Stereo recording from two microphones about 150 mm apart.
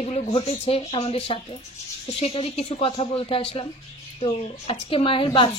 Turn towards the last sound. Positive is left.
turn(degrees=35)  # may be behind; listen again after turning